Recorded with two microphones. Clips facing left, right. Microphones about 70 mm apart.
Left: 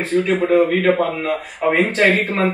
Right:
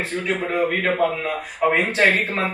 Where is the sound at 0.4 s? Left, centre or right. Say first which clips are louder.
Left 6 dB; centre.